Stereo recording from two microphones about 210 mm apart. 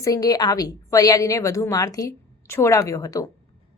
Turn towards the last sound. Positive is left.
turn(degrees=15)  # may be behind; listen again after turning